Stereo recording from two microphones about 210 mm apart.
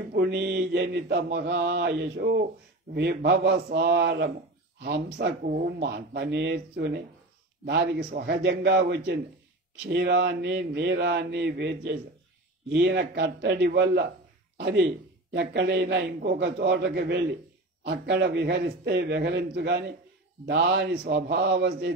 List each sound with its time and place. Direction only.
0.1 s mantra: 55° right (ahead or behind)
3.3 s speech: 55° right (ahead or behind)
5.7 s mantra: 55° right (ahead or behind)
9.8 s speech: 55° right (ahead or behind)
14.6 s mantra: 55° right (ahead or behind)